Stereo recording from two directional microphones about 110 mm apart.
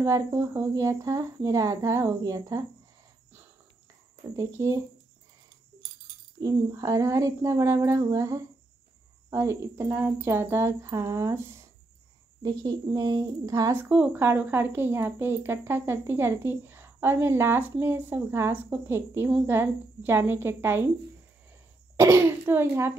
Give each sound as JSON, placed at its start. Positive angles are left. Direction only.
{"t": 0.0, "sound": "speech", "side_deg": -25}
{"t": 4.4, "sound": "speech", "side_deg": -25}
{"t": 6.4, "sound": "speech", "side_deg": -30}
{"t": 12.4, "sound": "speech", "side_deg": -35}
{"t": 21.9, "sound": "speech", "side_deg": -25}